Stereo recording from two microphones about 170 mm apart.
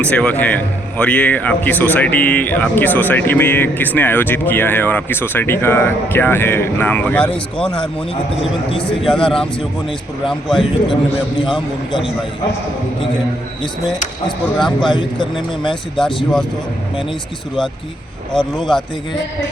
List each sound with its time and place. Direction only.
0.0 s a man's voice: 5° left (ahead or behind)
8.4 s a man's voice: 30° left (ahead or behind)
10.2 s speech: centre (ahead or behind)
14.3 s speech: 30° left (ahead or behind)
15.7 s speech: centre (ahead or behind)